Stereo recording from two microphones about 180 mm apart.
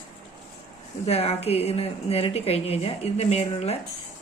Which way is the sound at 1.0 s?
35° left (ahead or behind).